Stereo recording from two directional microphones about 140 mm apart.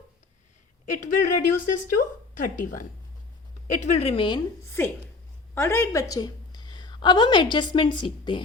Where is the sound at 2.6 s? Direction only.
75° left (ahead or behind).